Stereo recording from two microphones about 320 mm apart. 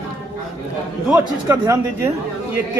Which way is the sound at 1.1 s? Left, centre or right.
Centre.